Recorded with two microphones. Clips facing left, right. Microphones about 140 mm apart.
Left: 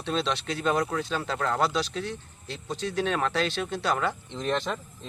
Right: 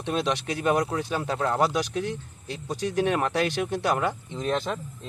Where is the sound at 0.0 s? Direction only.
15° right (ahead or behind).